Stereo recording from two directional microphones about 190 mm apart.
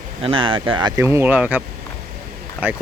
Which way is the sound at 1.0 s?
10° right (ahead or behind).